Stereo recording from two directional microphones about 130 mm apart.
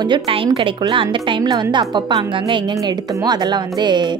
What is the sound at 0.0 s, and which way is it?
A woman's voice, 40° right (ahead or behind).